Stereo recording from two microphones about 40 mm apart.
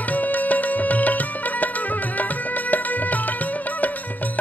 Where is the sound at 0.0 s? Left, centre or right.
Left.